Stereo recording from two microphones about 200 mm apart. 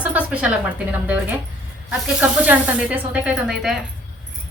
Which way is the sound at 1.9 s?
5° right (ahead or behind).